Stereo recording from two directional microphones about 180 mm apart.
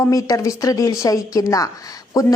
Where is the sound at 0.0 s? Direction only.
20° left (ahead or behind).